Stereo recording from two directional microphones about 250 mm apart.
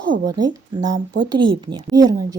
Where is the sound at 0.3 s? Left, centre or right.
Centre.